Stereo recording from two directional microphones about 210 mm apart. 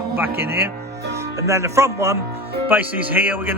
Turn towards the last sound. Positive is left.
turn(degrees=-10)  # may be behind; listen again after turning